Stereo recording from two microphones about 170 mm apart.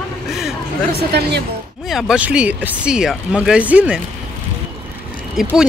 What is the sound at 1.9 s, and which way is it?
Speech, centre (ahead or behind).